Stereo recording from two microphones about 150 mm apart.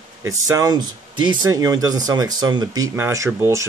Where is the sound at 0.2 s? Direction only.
20° right (ahead or behind).